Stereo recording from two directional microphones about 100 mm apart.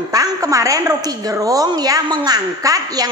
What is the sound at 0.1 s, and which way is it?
A woman's voice, 35° right (ahead or behind).